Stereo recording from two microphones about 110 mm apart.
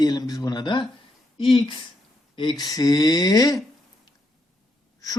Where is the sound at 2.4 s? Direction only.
40° left (ahead or behind).